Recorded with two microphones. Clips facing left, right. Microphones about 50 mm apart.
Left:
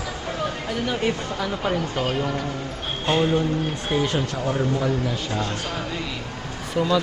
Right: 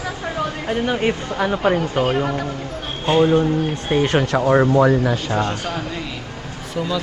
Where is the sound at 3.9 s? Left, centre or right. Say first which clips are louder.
Right 5 dB; right.